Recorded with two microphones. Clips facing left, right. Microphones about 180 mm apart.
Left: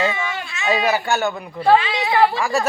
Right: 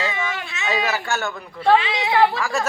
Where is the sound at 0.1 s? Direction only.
20° right (ahead or behind).